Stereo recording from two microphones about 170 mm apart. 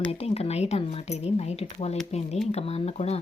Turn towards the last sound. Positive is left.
turn(degrees=40)  # may be behind; listen again after turning